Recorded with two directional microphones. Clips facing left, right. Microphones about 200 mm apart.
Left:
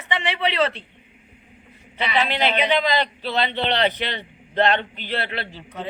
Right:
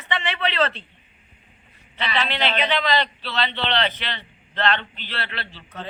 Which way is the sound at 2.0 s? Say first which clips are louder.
Left 3 dB; 15° left (ahead or behind).